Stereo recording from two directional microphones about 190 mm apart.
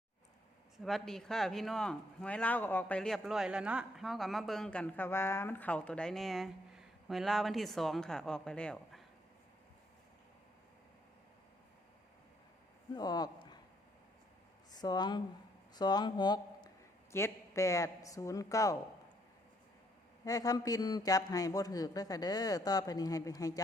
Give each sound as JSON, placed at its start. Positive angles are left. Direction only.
{"t": 0.8, "sound": "speech", "side_deg": 0}
{"t": 12.9, "sound": "speech", "side_deg": 20}
{"t": 14.7, "sound": "speech", "side_deg": 20}
{"t": 20.2, "sound": "a man's voice", "side_deg": 20}